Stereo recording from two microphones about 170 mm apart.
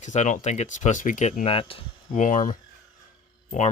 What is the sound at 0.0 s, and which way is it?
Speech, 45° left (ahead or behind).